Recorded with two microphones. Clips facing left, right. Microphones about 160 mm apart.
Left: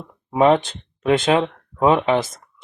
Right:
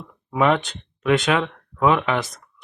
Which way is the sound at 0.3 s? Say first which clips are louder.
Left 4 dB; 30° left (ahead or behind).